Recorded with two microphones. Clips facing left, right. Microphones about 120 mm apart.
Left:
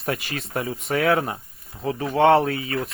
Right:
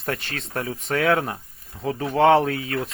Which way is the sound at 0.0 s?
5° left (ahead or behind).